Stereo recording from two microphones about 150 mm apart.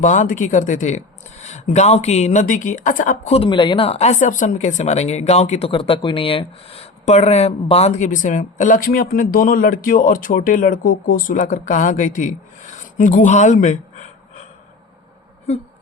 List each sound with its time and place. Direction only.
0.0 s speech: 55° left (ahead or behind)
3.3 s speech: 35° left (ahead or behind); by 14.4 s 50° left (ahead or behind)